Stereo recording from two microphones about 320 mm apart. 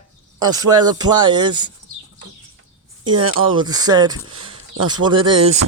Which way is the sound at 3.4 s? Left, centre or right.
Centre.